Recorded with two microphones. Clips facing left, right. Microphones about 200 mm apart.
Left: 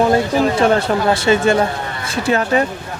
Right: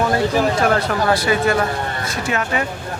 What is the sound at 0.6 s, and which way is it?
Speech, 25° left (ahead or behind).